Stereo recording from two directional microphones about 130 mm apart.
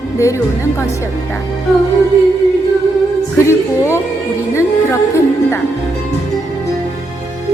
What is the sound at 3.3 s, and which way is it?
Music, 20° left (ahead or behind).